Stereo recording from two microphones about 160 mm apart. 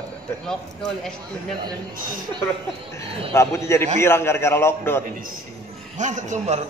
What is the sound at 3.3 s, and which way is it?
A man's voice, 15° left (ahead or behind).